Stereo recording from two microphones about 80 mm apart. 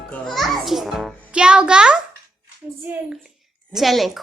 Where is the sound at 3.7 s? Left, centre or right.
Centre.